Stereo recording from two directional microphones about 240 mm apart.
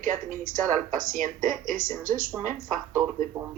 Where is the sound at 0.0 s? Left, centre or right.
Right.